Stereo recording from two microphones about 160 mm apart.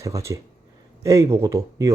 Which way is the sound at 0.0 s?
20° right (ahead or behind).